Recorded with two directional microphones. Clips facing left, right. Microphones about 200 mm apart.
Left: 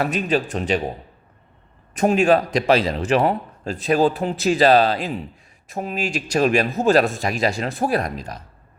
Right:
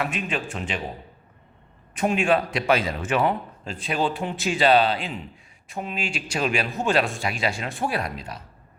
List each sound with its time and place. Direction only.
0.0 s a man's voice: 40° left (ahead or behind)
1.9 s a man's voice: 40° left (ahead or behind)